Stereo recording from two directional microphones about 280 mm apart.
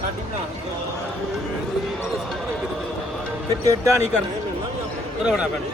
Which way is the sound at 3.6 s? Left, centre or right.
Centre.